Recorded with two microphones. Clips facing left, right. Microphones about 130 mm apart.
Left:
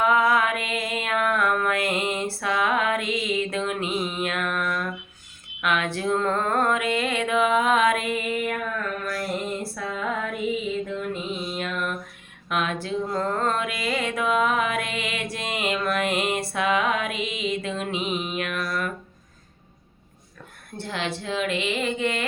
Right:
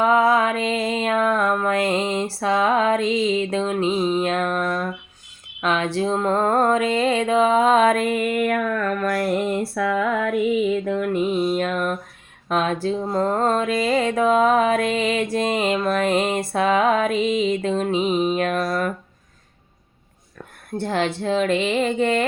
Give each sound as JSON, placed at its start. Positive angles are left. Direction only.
{"t": 0.0, "sound": "a sound", "side_deg": -30}
{"t": 6.4, "sound": "music", "side_deg": -35}
{"t": 9.0, "sound": "mantra", "side_deg": -60}
{"t": 9.7, "sound": "female singing", "side_deg": -65}
{"t": 10.8, "sound": "a sound", "side_deg": -60}
{"t": 20.8, "sound": "speech", "side_deg": -45}